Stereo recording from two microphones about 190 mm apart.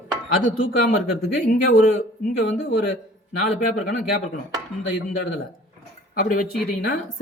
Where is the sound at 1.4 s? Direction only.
45° left (ahead or behind).